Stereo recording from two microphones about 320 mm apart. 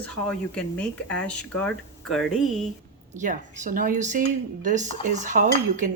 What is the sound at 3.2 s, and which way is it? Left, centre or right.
A woman's voice, right.